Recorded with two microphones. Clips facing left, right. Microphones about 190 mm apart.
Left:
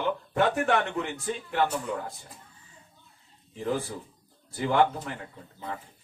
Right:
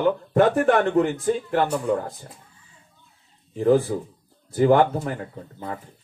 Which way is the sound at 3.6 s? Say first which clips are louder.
Right 11 dB; 45° right (ahead or behind).